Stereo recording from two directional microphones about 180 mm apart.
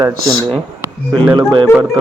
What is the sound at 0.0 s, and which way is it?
Speech, 15° right (ahead or behind).